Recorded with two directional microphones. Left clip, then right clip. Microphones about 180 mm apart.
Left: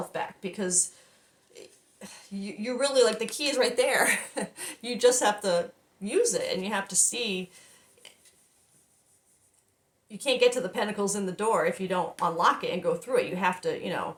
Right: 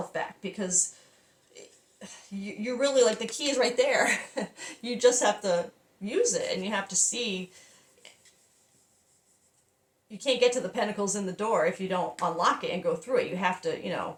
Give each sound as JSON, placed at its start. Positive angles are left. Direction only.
{"t": 2.0, "sound": "a woman's voice", "side_deg": 35}
{"t": 10.1, "sound": "speech", "side_deg": 30}